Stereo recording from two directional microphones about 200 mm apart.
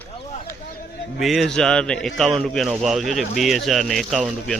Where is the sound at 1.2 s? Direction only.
Centre (ahead or behind).